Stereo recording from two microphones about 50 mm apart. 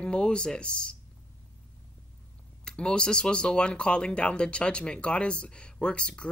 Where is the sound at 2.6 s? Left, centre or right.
Centre.